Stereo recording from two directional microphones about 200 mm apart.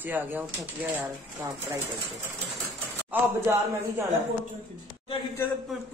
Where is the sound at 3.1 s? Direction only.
10° right (ahead or behind).